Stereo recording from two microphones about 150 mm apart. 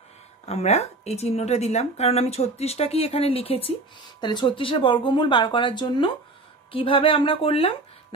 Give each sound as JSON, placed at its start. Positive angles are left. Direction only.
{"t": 0.5, "sound": "speech", "side_deg": 45}